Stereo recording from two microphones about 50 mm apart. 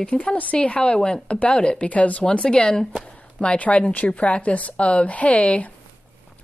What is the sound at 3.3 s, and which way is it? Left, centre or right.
Speech, left.